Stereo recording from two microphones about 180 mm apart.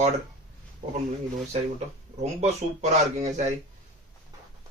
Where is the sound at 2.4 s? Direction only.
40° right (ahead or behind).